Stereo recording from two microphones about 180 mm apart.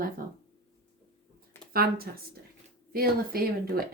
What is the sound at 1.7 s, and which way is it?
Speech, 60° right (ahead or behind).